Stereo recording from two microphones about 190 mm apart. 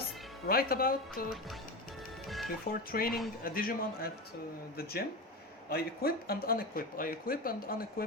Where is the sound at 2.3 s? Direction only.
Centre (ahead or behind).